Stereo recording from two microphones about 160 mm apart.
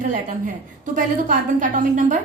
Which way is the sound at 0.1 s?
55° right (ahead or behind).